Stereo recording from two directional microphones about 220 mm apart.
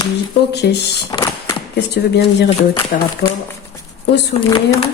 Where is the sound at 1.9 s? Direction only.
50° left (ahead or behind).